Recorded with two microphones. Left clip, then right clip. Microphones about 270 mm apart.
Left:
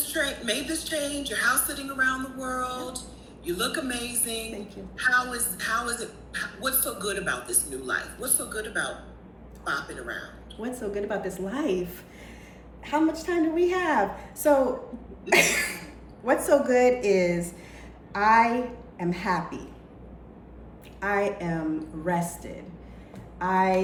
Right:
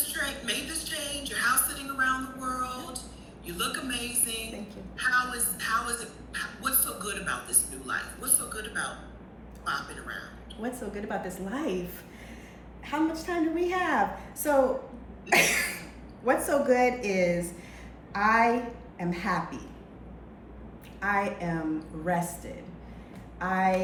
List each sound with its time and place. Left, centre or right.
0.0 s a woman's voice: centre
12.8 s a woman's voice: centre
21.0 s a woman's voice: centre
23.4 s a woman's voice: centre